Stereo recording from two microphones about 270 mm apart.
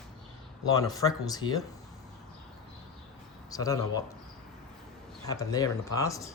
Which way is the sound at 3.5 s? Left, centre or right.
Centre.